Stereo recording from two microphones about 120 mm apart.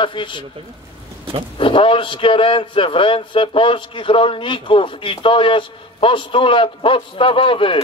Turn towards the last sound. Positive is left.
turn(degrees=45)  # may be behind; listen again after turning